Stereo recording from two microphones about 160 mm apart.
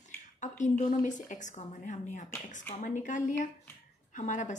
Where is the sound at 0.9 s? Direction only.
50° left (ahead or behind).